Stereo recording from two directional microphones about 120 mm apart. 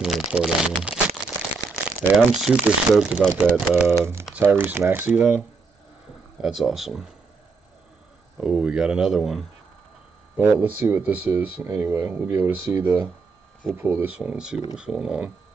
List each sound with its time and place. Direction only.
0.0 s crumpling: 5° right (ahead or behind)
2.1 s speech: 5° right (ahead or behind)
3.2 s speech: 10° left (ahead or behind)
3.5 s speech: 15° right (ahead or behind)
6.4 s speech: 5° right (ahead or behind)
8.4 s speech: 5° right (ahead or behind)
10.3 s speech: 10° right (ahead or behind)